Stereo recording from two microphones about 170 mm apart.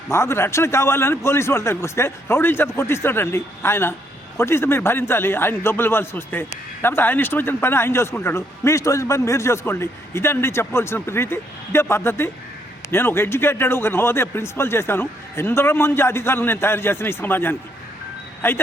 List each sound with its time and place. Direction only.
0.1 s a man's voice: 15° left (ahead or behind)